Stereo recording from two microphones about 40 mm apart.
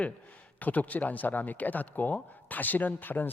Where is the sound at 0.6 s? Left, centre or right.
Left.